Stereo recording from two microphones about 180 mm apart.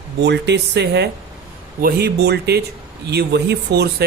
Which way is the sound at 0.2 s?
70° right (ahead or behind).